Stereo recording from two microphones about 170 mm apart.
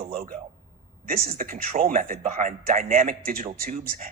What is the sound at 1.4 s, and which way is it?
Speech, 55° right (ahead or behind).